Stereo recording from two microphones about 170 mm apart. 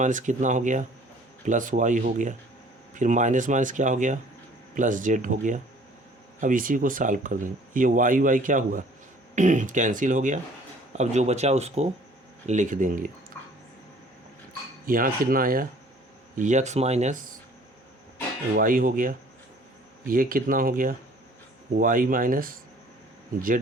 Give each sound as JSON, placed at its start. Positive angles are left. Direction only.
{"t": 0.0, "sound": "speech", "side_deg": -50}
{"t": 14.8, "sound": "speech", "side_deg": -55}
{"t": 18.5, "sound": "speech", "side_deg": -55}